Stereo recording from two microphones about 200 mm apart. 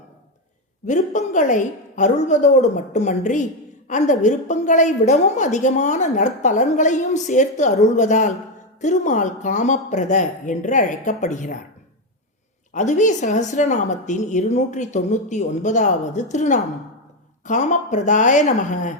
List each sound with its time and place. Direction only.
0.9 s a woman's voice: 35° left (ahead or behind)
12.7 s a woman's voice: 35° left (ahead or behind)